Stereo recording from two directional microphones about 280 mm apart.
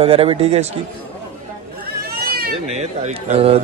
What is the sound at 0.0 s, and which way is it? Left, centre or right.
Speech, right.